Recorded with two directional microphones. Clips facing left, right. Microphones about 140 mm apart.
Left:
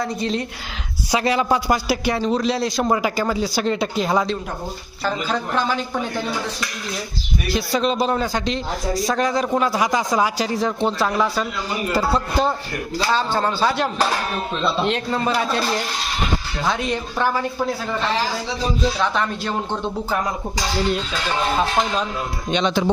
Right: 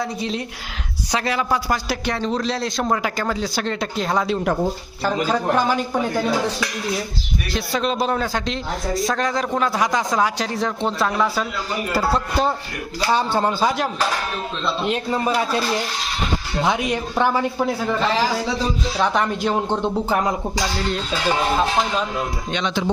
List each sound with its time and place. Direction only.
0.0 s speech: 5° right (ahead or behind)
1.1 s speech: 15° left (ahead or behind)
1.9 s speech: 10° left (ahead or behind)
5.3 s speech: 10° right (ahead or behind)
7.5 s speech: centre (ahead or behind)
13.1 s speech: 15° right (ahead or behind)
14.8 s speech: 10° right (ahead or behind)
16.6 s speech: 15° right (ahead or behind)
18.9 s speech: 15° right (ahead or behind)
21.6 s speech: centre (ahead or behind)